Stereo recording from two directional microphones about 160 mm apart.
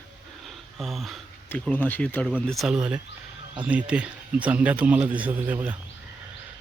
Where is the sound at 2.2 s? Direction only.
Centre (ahead or behind).